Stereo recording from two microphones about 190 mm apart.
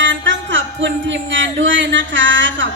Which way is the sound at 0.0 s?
75° right (ahead or behind).